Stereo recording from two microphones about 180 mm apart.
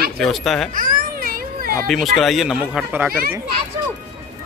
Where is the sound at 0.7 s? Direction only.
50° right (ahead or behind).